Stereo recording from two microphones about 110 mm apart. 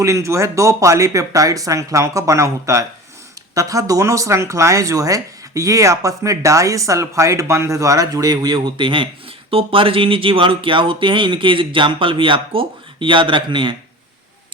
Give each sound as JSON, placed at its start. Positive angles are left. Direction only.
{"t": 0.0, "sound": "speech", "side_deg": -30}